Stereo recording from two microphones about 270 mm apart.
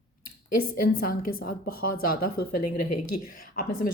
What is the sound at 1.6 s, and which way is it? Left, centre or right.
Speech, left.